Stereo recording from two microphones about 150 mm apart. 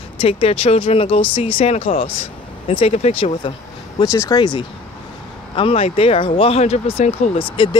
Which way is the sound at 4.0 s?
25° left (ahead or behind).